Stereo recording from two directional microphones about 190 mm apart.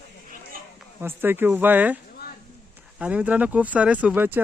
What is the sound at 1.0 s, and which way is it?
Speech, 10° right (ahead or behind).